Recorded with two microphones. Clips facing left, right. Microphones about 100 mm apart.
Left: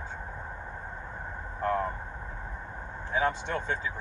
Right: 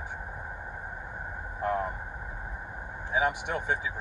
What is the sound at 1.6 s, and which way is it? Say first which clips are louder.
Speech: left 1 dB; 15° right (ahead or behind).